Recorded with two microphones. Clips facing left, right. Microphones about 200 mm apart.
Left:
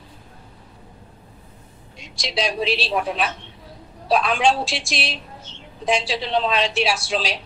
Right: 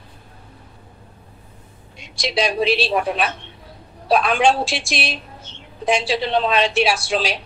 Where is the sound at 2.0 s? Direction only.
60° right (ahead or behind).